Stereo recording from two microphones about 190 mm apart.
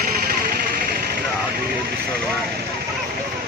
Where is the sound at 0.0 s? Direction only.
50° right (ahead or behind).